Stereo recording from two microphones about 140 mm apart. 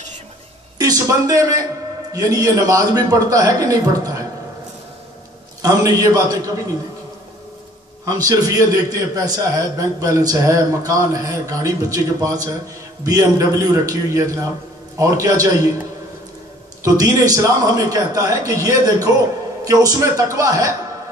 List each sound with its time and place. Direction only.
0.7 s a man's voice: 25° right (ahead or behind)
5.6 s a man's voice: 25° right (ahead or behind)
8.0 s a man's voice: 25° right (ahead or behind)
16.8 s a man's voice: 25° right (ahead or behind)